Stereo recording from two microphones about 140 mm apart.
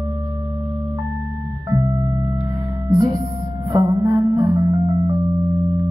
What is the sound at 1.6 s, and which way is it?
Music, 25° right (ahead or behind).